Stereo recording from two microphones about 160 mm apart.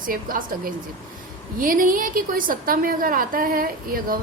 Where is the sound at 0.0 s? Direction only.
60° right (ahead or behind).